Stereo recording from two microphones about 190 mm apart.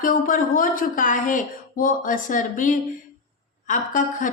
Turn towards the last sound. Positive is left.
turn(degrees=40)  # may be behind; listen again after turning